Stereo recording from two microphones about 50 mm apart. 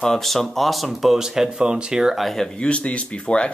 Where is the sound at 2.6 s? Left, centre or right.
Left.